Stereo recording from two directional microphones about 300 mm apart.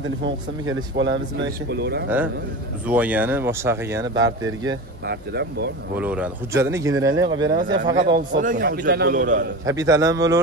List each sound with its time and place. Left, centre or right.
0.2 s speech: right
2.9 s speech: centre
5.0 s speech: right
5.9 s a man's voice: centre; by 9.5 s right
9.7 s speech: centre